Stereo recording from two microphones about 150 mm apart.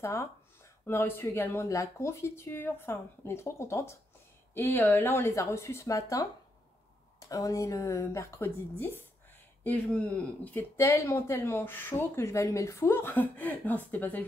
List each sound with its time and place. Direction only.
0.0 s a woman's voice: 20° left (ahead or behind)